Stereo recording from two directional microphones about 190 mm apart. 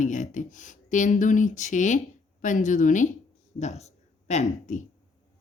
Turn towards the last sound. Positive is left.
turn(degrees=40)  # may be behind; listen again after turning